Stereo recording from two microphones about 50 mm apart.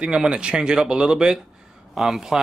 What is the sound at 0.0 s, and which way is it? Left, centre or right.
Speech, centre.